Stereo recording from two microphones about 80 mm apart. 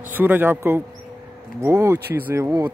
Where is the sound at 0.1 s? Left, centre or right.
Right.